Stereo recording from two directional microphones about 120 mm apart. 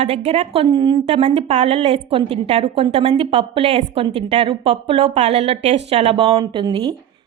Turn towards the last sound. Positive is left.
turn(degrees=-45)  # may be behind; listen again after turning